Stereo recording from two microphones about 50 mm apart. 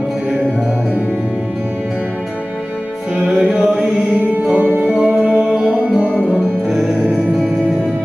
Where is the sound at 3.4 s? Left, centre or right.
Right.